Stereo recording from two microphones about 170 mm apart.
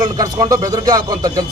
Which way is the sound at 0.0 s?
20° right (ahead or behind).